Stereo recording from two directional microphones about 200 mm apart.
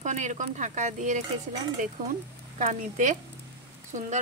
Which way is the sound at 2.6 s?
40° right (ahead or behind).